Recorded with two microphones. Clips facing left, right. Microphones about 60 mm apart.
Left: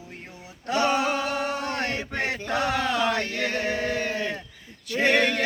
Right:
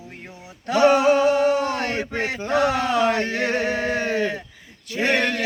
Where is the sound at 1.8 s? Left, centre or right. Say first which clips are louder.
Right 4 dB; right.